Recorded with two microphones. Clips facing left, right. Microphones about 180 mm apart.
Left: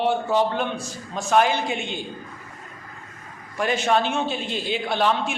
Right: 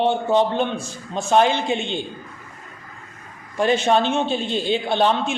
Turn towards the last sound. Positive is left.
turn(degrees=-25)  # may be behind; listen again after turning